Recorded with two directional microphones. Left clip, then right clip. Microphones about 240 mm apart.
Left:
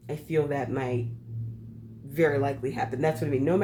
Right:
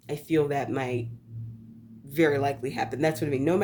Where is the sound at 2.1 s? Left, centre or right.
Right.